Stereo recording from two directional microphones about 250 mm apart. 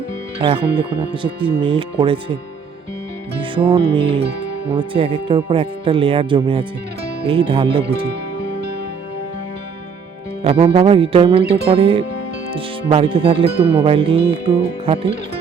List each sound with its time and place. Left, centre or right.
0.4 s speech: right
3.5 s speech: centre
10.4 s speech: right
11.4 s music: right
11.7 s speech: right